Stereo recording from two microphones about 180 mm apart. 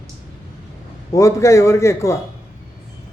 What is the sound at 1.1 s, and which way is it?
A man's voice, 15° left (ahead or behind).